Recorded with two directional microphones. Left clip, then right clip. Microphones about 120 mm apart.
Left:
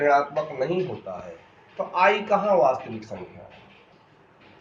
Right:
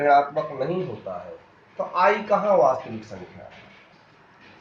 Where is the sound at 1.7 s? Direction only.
55° right (ahead or behind).